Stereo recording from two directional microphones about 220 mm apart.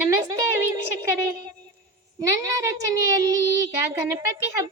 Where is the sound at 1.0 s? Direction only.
15° right (ahead or behind).